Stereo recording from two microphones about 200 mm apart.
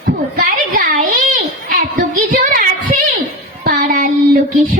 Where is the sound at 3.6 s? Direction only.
40° right (ahead or behind).